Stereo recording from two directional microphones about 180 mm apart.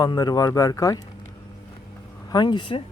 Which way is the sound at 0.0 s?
20° left (ahead or behind).